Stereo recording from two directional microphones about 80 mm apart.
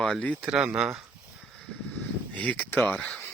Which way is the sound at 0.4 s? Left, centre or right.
Centre.